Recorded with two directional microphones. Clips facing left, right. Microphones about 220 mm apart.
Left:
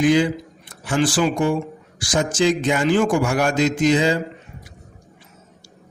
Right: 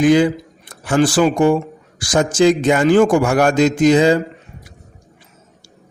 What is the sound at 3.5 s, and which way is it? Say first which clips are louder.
Speech: right 5 dB; 40° right (ahead or behind).